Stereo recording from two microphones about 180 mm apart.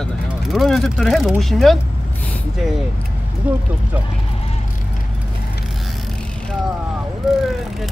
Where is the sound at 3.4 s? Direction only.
5° right (ahead or behind).